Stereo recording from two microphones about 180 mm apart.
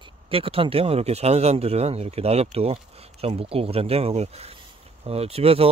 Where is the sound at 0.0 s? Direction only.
30° right (ahead or behind).